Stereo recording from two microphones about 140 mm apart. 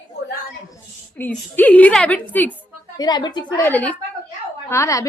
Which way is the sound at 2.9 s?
30° left (ahead or behind).